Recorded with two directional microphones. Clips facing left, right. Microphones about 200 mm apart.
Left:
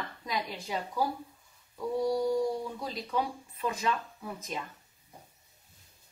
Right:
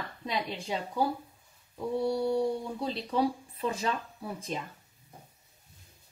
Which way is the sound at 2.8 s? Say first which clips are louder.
Right 6 dB; 30° right (ahead or behind).